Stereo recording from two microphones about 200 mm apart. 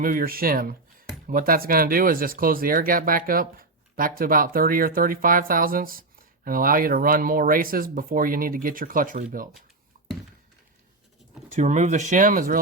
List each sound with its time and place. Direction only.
0.0 s speech: 45° right (ahead or behind)
11.5 s speech: 35° right (ahead or behind)